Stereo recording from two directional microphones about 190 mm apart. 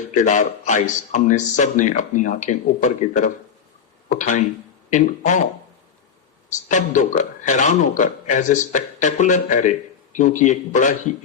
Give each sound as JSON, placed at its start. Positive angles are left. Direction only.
{"t": 0.1, "sound": "a man's voice", "side_deg": 40}
{"t": 4.1, "sound": "a man's voice", "side_deg": 40}
{"t": 6.7, "sound": "a man's voice", "side_deg": 40}